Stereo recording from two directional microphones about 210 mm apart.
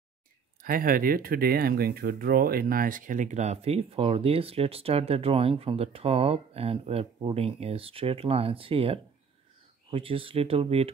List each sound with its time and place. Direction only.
0.6 s speech: 40° right (ahead or behind)